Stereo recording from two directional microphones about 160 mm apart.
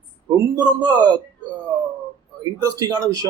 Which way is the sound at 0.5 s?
25° right (ahead or behind).